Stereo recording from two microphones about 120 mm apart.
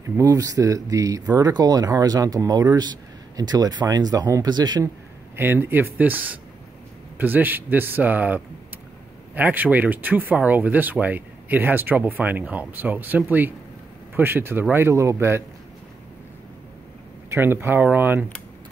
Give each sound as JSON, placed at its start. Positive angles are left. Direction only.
{"t": 0.0, "sound": "a man's voice", "side_deg": -25}
{"t": 5.3, "sound": "speech", "side_deg": -20}
{"t": 17.3, "sound": "speech", "side_deg": -20}